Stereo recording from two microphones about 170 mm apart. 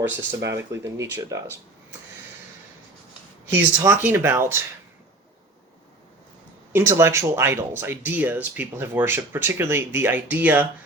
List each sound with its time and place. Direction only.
0.0 s speech: 15° right (ahead or behind)
3.8 s speech: 15° right (ahead or behind)
6.7 s speech: 15° right (ahead or behind)